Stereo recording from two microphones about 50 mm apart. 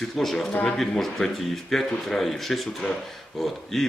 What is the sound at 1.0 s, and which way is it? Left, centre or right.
Speech, centre.